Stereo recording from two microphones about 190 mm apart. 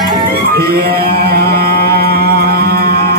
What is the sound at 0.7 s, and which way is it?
Music, 55° right (ahead or behind).